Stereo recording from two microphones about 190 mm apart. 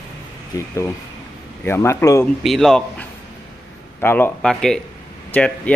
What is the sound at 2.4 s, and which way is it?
Speech, centre (ahead or behind).